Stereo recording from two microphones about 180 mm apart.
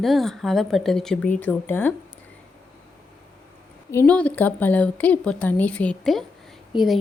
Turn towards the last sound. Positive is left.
turn(degrees=0)  # may be behind; listen again after turning